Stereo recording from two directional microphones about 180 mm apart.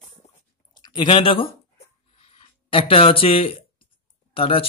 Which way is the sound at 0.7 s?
25° left (ahead or behind).